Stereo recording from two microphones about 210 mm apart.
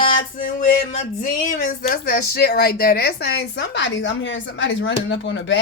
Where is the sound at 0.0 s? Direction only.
40° left (ahead or behind).